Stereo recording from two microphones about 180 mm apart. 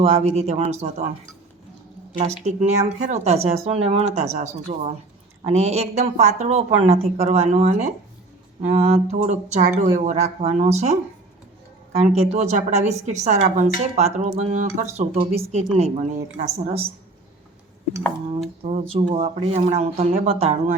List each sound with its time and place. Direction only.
0.0 s speech: 35° right (ahead or behind)
2.1 s speech: 40° right (ahead or behind)
12.0 s speech: 35° right (ahead or behind)
18.6 s speech: 35° right (ahead or behind)